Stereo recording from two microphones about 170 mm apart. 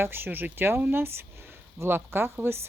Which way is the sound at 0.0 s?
10° right (ahead or behind).